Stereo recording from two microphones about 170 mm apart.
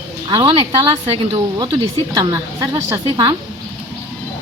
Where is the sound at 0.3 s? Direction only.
30° right (ahead or behind).